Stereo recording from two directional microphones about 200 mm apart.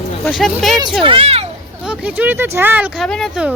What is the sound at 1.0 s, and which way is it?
Speech, 25° right (ahead or behind).